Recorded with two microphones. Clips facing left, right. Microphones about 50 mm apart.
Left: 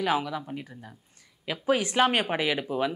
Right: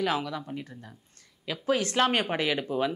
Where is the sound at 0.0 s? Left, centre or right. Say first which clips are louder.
Left 2 dB; centre.